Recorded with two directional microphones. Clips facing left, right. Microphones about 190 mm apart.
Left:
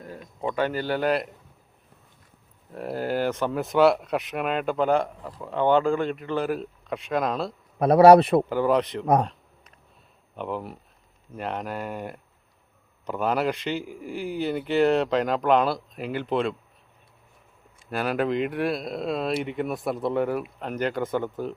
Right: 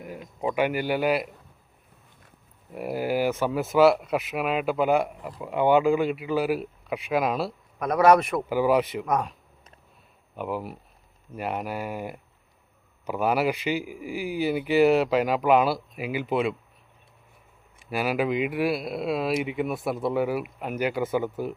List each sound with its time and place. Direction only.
0.0 s speech: 15° right (ahead or behind)
2.7 s speech: 10° right (ahead or behind)
7.8 s speech: 30° left (ahead or behind)
8.4 s speech: 10° right (ahead or behind)
10.3 s speech: 5° right (ahead or behind)
17.8 s speech: 5° right (ahead or behind)